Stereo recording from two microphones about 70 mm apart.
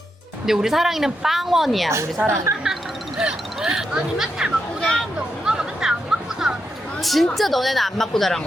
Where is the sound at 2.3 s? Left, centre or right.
Right.